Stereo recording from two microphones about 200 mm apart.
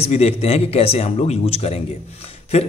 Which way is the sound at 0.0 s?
30° left (ahead or behind).